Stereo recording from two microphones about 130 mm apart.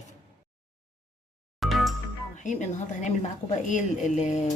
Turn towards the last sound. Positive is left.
turn(degrees=65)  # may be behind; listen again after turning